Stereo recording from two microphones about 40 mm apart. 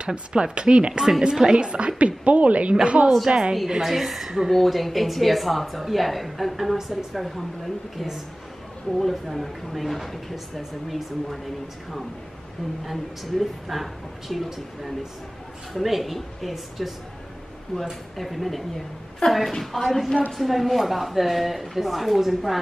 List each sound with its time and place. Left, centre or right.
0.0 s a woman's voice: right
3.6 s a woman's voice: centre
4.5 s speech: centre
12.8 s speech: centre
18.1 s speech: centre
19.2 s a woman's voice: left
19.6 s speech: centre